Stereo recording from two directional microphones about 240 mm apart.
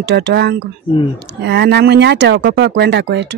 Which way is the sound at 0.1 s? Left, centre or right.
Right.